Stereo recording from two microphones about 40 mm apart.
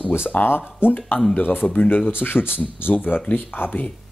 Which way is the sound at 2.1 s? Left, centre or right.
Left.